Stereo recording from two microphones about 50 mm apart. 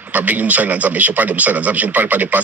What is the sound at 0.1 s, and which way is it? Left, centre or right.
Speech, right.